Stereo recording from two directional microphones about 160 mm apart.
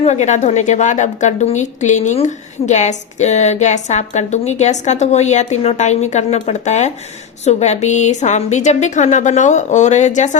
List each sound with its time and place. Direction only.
0.0 s a woman's voice: 45° left (ahead or behind)